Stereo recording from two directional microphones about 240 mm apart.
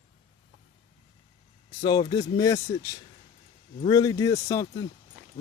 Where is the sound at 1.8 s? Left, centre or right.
Centre.